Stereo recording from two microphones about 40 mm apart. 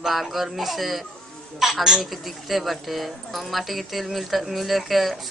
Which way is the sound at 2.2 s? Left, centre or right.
Centre.